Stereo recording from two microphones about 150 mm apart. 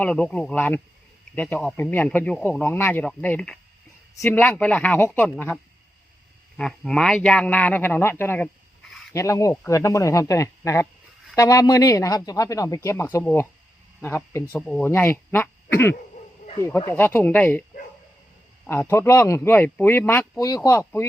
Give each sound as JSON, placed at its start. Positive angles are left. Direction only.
{"t": 0.0, "sound": "speech", "side_deg": 10}
{"t": 6.6, "sound": "speech", "side_deg": 5}